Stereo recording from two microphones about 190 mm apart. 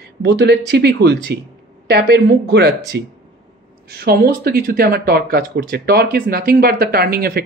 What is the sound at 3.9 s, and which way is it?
Speech, 55° right (ahead or behind).